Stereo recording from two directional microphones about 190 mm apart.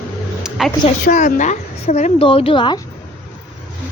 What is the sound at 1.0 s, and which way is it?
A woman's voice, 40° left (ahead or behind).